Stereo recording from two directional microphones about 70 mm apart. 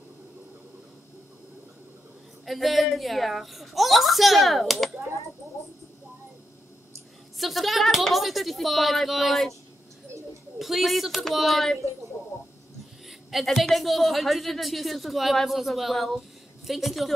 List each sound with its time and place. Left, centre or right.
2.4 s a woman's voice: centre
7.3 s a woman's voice: centre
10.6 s a woman's voice: centre
13.3 s a woman's voice: centre